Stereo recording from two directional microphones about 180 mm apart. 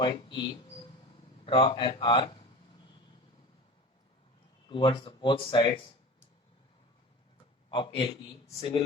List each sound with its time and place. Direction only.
0.0 s a man's voice: 25° left (ahead or behind)
4.7 s a man's voice: 30° left (ahead or behind)
7.7 s a man's voice: 25° left (ahead or behind)